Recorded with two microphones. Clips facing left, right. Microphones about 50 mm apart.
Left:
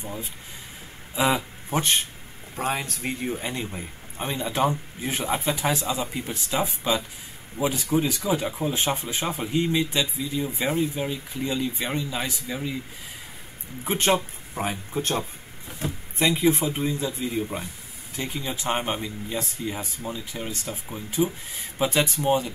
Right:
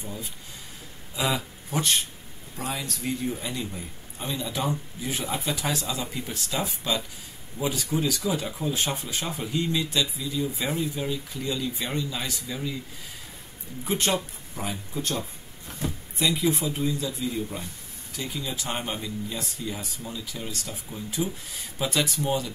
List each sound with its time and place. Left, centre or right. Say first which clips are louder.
0.0 s speech: left 2 dB; left
2.5 s a man's voice: left 5 dB; left
5.5 s speech: left 3 dB; left
13.8 s a man's voice: left 3 dB; left